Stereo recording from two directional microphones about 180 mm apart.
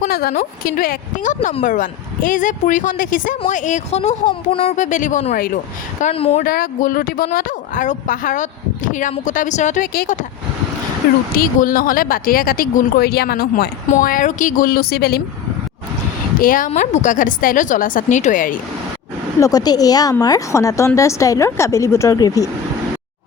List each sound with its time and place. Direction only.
0.1 s speech: 55° left (ahead or behind)
6.0 s speech: 35° left (ahead or behind)
6.4 s speech: 55° left (ahead or behind)
13.9 s speech: 50° left (ahead or behind)
16.4 s speech: 50° left (ahead or behind)
19.4 s speech: 20° left (ahead or behind)